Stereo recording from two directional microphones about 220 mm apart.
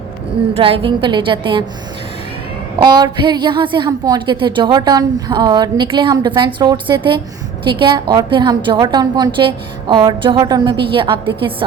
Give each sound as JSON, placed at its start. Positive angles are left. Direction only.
{"t": 0.5, "sound": "a woman's voice", "side_deg": -25}
{"t": 2.7, "sound": "a woman's voice", "side_deg": -20}